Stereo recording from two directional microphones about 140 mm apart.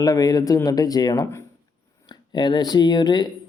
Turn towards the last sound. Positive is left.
turn(degrees=30)  # may be behind; listen again after turning